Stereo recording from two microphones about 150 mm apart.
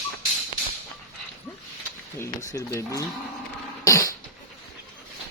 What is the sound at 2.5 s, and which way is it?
Speech, 20° left (ahead or behind).